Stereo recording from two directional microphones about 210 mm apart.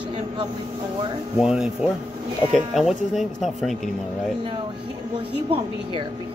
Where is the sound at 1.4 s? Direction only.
5° right (ahead or behind).